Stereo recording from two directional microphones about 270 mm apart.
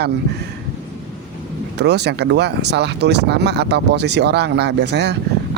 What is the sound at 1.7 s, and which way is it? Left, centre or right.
Speech, right.